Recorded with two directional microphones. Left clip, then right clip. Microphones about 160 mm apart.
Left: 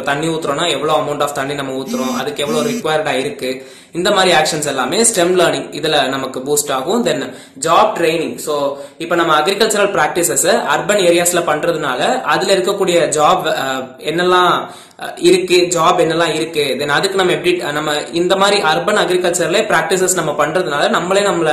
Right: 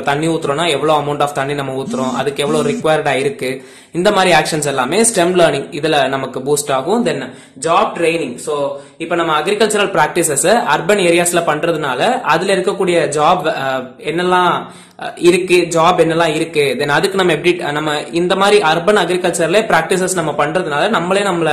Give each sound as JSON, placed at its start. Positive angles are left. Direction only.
{"t": 0.0, "sound": "a man's voice", "side_deg": -40}
{"t": 7.6, "sound": "a man's voice", "side_deg": -20}